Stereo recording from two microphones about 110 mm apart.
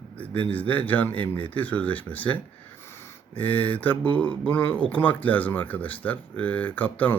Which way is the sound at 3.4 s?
15° left (ahead or behind).